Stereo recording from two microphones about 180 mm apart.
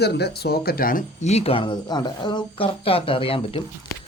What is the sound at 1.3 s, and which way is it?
Speech, 30° left (ahead or behind).